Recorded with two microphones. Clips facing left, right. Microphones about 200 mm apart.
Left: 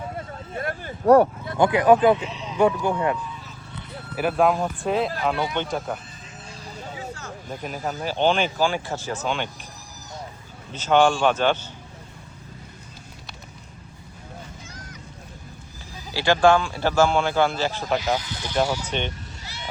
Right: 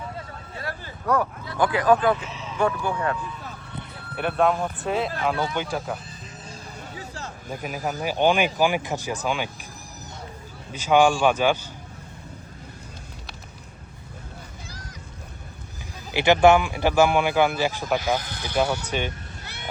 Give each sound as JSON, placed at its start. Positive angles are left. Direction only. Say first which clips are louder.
{"t": 0.5, "sound": "a sound", "louder": "left 5 dB", "side_deg": 50}
{"t": 1.0, "sound": "speech", "louder": "left 9 dB", "side_deg": 30}
{"t": 2.3, "sound": "a sound", "louder": "left 2 dB", "side_deg": 0}
{"t": 2.6, "sound": "speech", "louder": "left 4 dB", "side_deg": 20}
{"t": 4.1, "sound": "speech", "louder": "left 2 dB", "side_deg": 5}
{"t": 7.5, "sound": "speech", "louder": "right 1 dB", "side_deg": -10}
{"t": 10.7, "sound": "speech", "louder": "even", "side_deg": -10}
{"t": 16.1, "sound": "speech", "louder": "right 2 dB", "side_deg": -20}
{"t": 18.0, "sound": "speech", "louder": "even", "side_deg": -55}
{"t": 18.9, "sound": "speech", "louder": "even", "side_deg": -10}
{"t": 19.4, "sound": "a sound", "louder": "left 1 dB", "side_deg": -55}